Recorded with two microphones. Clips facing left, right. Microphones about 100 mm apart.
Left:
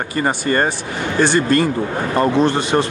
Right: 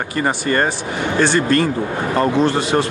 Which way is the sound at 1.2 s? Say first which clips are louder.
Left 1 dB; centre (ahead or behind).